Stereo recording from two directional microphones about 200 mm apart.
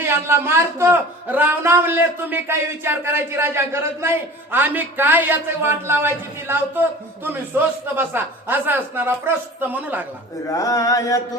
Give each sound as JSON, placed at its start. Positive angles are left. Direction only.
{"t": 0.0, "sound": "speech", "side_deg": -15}
{"t": 7.3, "sound": "speech", "side_deg": -10}
{"t": 10.5, "sound": "mantra", "side_deg": 15}